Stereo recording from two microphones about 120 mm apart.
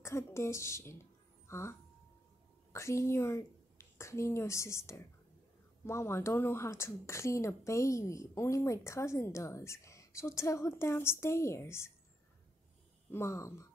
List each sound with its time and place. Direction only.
0.0 s a woman's voice: 25° left (ahead or behind)
13.1 s a woman's voice: 25° left (ahead or behind)